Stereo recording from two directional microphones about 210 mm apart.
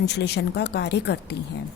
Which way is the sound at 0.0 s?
55° left (ahead or behind).